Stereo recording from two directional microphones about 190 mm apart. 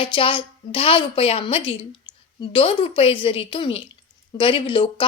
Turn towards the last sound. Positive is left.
turn(degrees=25)  # may be behind; listen again after turning